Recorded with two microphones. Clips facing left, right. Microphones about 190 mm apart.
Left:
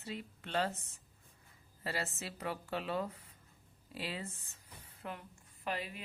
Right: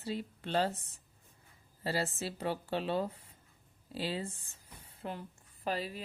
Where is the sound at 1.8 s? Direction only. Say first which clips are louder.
Right 5 dB; 30° right (ahead or behind).